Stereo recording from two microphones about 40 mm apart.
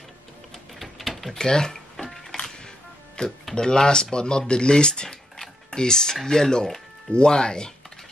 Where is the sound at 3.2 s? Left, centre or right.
Left.